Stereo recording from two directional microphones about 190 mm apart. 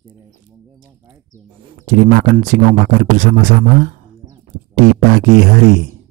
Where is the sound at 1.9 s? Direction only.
45° right (ahead or behind).